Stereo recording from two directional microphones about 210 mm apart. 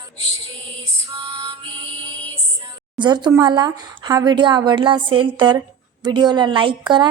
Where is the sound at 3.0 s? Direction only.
20° right (ahead or behind).